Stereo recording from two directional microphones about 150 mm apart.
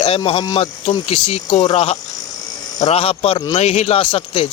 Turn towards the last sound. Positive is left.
turn(degrees=40)  # may be behind; listen again after turning